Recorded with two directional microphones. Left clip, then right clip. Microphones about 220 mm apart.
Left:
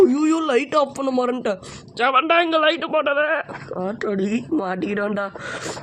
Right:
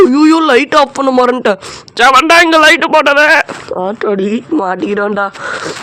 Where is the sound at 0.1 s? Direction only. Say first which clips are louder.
Right 12 dB; 15° right (ahead or behind).